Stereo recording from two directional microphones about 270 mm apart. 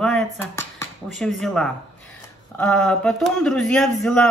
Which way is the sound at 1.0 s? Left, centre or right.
Centre.